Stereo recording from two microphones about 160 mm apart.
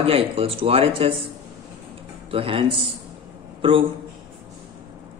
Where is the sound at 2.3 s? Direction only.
35° right (ahead or behind).